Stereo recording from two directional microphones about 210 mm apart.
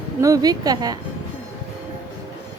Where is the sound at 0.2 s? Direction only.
15° right (ahead or behind).